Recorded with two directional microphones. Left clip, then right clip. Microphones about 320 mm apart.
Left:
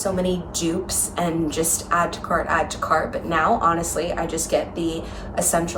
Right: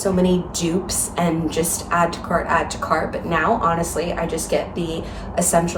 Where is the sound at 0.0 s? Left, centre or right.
Centre.